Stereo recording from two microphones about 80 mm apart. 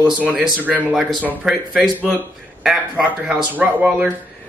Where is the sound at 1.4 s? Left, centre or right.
Centre.